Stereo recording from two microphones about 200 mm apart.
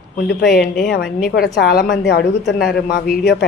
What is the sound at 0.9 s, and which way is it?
A woman's voice, 45° left (ahead or behind).